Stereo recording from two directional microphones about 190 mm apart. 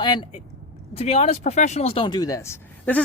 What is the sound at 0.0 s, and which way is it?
Speech, 25° left (ahead or behind).